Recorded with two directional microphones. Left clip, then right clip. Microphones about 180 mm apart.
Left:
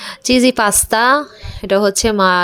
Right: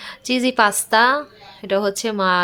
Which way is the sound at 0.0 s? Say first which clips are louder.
Left 8 dB; 30° left (ahead or behind).